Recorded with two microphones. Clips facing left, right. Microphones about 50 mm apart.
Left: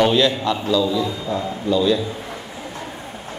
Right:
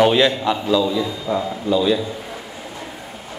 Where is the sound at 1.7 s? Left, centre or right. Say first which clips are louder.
Even; centre.